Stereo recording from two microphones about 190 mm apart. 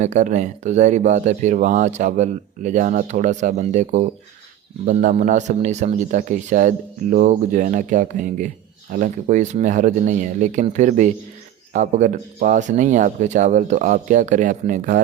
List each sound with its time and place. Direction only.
0.0 s speech: 40° right (ahead or behind)